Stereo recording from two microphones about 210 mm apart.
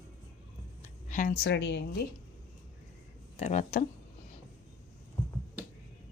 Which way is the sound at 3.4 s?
30° left (ahead or behind).